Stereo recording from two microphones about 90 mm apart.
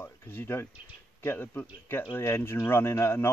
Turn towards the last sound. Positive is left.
turn(degrees=25)  # may be behind; listen again after turning